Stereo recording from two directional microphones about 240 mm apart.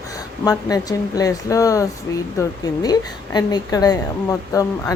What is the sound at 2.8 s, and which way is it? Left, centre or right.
Speech, centre.